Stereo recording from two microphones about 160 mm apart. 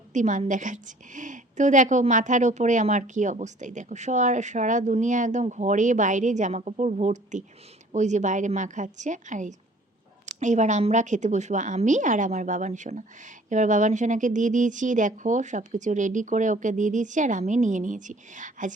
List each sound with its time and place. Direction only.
0.1 s a woman's voice: 50° right (ahead or behind)